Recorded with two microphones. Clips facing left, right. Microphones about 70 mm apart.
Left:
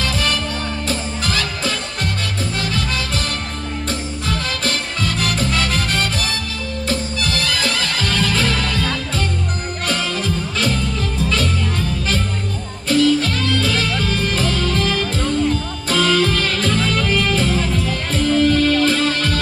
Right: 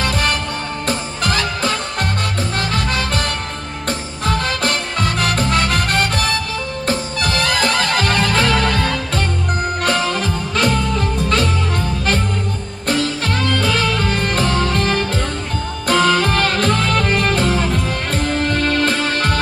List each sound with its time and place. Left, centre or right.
0.0 s music: right
4.3 s music: right
7.3 s music: right
12.9 s music: right